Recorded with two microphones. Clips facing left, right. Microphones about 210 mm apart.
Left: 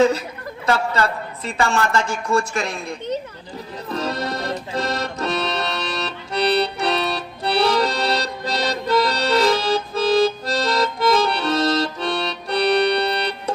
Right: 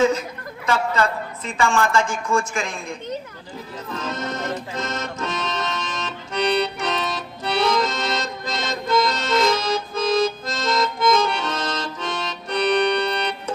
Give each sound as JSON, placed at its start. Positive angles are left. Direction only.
{"t": 0.6, "sound": "a woman's voice", "side_deg": 35}
{"t": 3.9, "sound": "accordion", "side_deg": 35}